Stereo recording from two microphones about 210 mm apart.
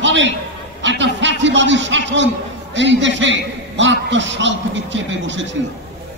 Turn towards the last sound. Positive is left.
turn(degrees=-60)  # may be behind; listen again after turning